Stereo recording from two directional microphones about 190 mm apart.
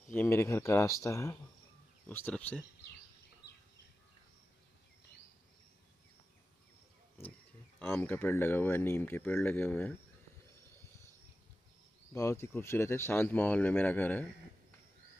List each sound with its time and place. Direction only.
0.1 s speech: 10° left (ahead or behind)
3.4 s bird: 65° left (ahead or behind)
7.8 s speech: 10° left (ahead or behind)
12.1 s speech: 15° left (ahead or behind)